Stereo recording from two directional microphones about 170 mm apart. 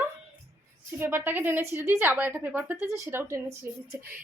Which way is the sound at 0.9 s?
15° right (ahead or behind).